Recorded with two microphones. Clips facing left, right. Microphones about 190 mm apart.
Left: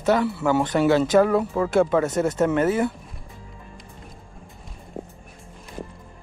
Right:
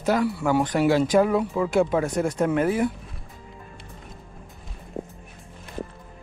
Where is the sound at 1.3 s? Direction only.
45° left (ahead or behind).